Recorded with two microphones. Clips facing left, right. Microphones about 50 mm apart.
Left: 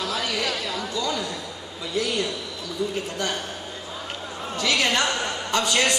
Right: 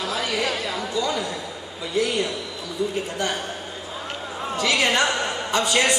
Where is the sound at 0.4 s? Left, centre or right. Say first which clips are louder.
Right 2 dB; right.